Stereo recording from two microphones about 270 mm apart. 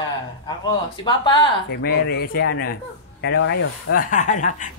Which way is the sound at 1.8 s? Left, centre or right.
Left.